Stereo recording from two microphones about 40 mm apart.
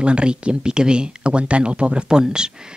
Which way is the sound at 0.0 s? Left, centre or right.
Right.